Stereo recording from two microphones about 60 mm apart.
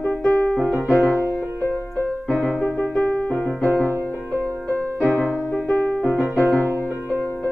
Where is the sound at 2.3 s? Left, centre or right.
Centre.